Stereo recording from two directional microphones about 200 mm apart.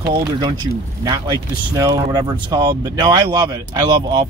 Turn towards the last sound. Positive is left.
turn(degrees=-20)  # may be behind; listen again after turning